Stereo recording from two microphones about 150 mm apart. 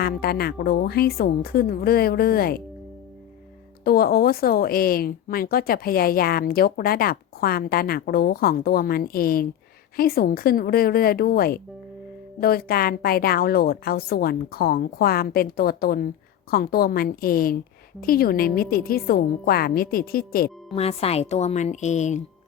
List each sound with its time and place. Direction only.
0.0 s a woman's voice: 90° left
3.8 s a woman's voice: 90° left
20.7 s speech: 45° left (ahead or behind)